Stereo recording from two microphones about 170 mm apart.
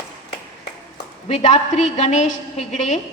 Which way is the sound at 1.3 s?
45° left (ahead or behind).